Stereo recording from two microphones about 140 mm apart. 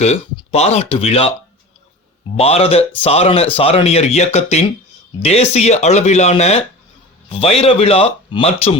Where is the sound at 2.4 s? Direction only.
45° left (ahead or behind).